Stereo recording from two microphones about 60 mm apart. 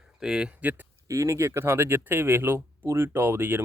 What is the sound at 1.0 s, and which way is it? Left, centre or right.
Speech, right.